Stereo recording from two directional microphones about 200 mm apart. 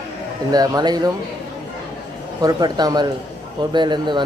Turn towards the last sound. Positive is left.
turn(degrees=-20)  # may be behind; listen again after turning